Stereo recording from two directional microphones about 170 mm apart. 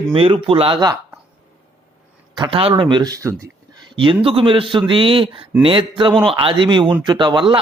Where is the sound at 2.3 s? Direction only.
30° right (ahead or behind).